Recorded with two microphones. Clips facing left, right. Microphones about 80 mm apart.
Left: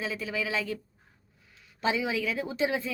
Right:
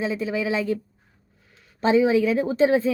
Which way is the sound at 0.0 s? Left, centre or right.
Right.